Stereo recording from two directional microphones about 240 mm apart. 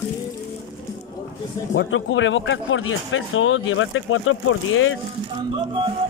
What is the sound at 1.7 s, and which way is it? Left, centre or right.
Speech, left.